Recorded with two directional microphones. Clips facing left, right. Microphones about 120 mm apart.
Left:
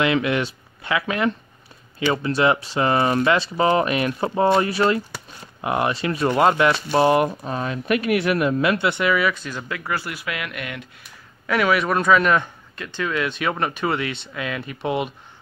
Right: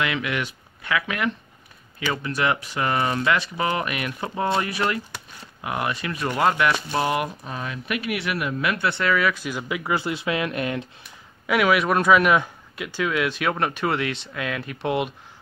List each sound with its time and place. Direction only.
0.0 s speech: 30° left (ahead or behind)
9.1 s speech: 5° left (ahead or behind)
9.4 s speech: 10° right (ahead or behind); by 10.9 s 30° right (ahead or behind)
11.4 s speech: 5° right (ahead or behind)